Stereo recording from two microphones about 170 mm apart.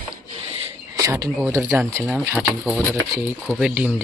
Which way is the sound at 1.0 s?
20° right (ahead or behind).